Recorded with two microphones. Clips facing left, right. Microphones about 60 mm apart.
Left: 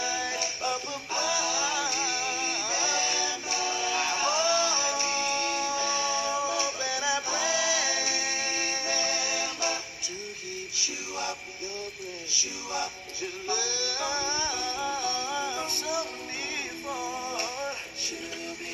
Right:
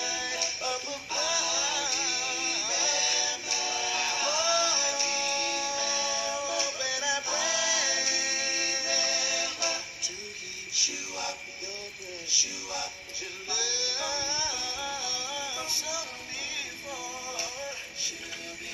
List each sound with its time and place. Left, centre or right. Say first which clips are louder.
0.0 s music: left 3 dB; left
13.5 s music: left 3 dB; left